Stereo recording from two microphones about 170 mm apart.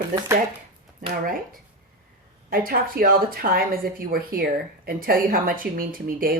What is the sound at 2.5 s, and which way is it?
Speech, 60° right (ahead or behind).